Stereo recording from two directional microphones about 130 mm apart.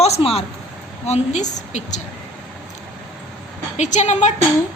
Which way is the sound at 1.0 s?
60° left (ahead or behind).